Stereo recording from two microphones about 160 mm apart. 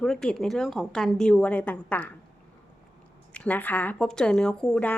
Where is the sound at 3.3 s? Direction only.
10° left (ahead or behind).